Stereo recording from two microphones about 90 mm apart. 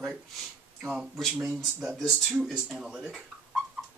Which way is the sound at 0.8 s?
10° right (ahead or behind).